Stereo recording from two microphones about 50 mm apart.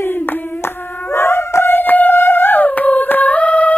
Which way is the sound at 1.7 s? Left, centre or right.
Left.